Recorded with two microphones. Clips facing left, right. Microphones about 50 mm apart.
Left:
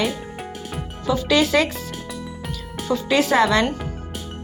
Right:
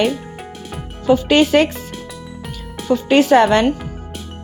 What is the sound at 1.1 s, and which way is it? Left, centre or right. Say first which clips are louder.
Speech: right 6 dB; right.